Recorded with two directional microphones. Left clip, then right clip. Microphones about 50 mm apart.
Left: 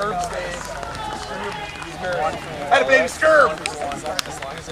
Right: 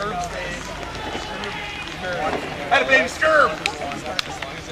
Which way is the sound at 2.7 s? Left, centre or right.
Left.